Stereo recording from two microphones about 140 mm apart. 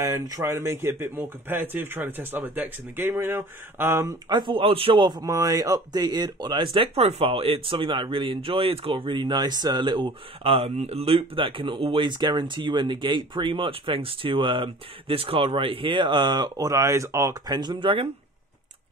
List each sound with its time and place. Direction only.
0.0 s speech: 25° right (ahead or behind)
4.3 s speech: 35° right (ahead or behind)